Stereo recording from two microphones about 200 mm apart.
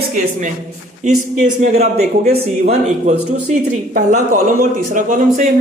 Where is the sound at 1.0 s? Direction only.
45° right (ahead or behind).